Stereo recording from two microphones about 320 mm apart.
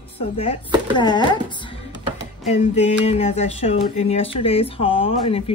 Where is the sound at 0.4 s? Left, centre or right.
Centre.